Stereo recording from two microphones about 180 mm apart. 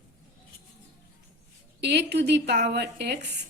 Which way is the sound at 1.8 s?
65° right (ahead or behind).